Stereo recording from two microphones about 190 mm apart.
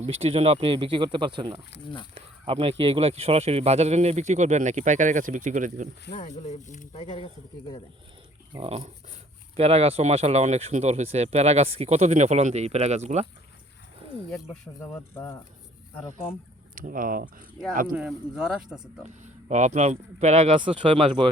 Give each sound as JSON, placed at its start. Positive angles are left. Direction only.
{"t": 0.2, "sound": "speech", "side_deg": -30}
{"t": 6.1, "sound": "speech", "side_deg": 35}
{"t": 8.5, "sound": "speech", "side_deg": -30}
{"t": 14.4, "sound": "speech", "side_deg": 5}
{"t": 16.7, "sound": "speech", "side_deg": -45}
{"t": 17.9, "sound": "speech", "side_deg": -5}
{"t": 19.0, "sound": "speech", "side_deg": -40}